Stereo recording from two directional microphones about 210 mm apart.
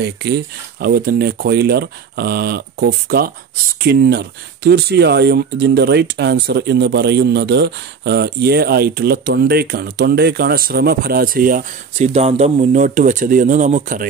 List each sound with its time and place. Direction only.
0.7 s speech: 45° right (ahead or behind)
12.1 s speech: 30° right (ahead or behind)